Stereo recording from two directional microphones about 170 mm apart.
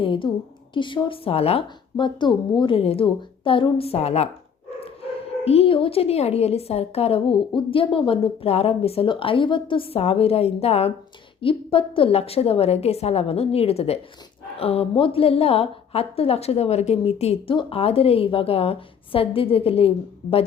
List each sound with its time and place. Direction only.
0.0 s a woman's voice: 30° left (ahead or behind)
5.5 s a woman's voice: 35° left (ahead or behind)